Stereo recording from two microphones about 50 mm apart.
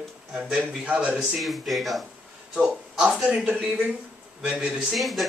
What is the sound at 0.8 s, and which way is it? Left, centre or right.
Speech, right.